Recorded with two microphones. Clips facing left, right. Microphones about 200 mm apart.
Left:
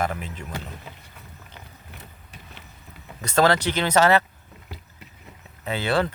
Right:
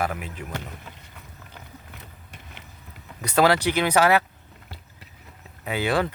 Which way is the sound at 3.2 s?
10° right (ahead or behind).